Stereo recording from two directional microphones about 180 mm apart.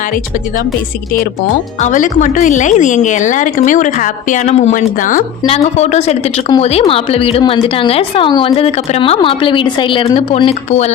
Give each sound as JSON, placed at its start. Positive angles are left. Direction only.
{"t": 1.8, "sound": "a woman's voice", "side_deg": 45}